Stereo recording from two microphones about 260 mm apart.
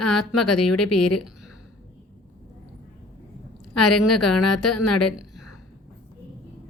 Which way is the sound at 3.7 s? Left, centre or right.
Left.